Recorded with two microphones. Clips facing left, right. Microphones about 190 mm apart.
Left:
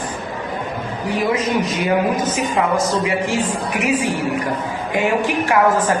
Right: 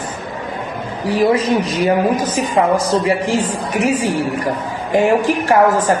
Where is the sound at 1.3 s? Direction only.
30° right (ahead or behind).